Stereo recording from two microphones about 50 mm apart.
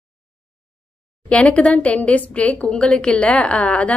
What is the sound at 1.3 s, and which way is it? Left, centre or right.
A woman's voice, left.